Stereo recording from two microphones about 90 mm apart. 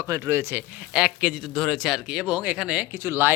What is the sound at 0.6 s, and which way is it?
Speech, 10° right (ahead or behind).